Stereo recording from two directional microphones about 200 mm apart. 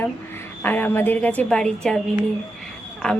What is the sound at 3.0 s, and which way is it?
Speech, 5° left (ahead or behind).